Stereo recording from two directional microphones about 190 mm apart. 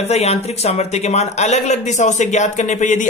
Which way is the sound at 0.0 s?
35° left (ahead or behind).